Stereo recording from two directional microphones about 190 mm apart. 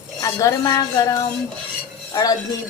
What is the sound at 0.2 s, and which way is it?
A woman's voice, 20° left (ahead or behind).